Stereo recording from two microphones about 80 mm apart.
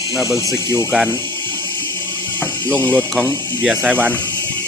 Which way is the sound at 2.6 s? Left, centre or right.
Centre.